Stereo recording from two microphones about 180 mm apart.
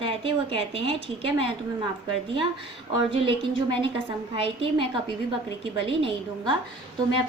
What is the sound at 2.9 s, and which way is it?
A woman's voice, 30° right (ahead or behind).